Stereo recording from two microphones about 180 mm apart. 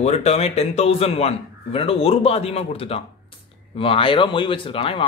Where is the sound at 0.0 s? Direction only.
35° left (ahead or behind).